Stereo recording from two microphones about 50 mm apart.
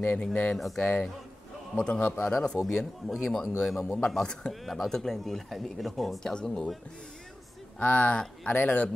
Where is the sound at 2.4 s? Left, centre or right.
Centre.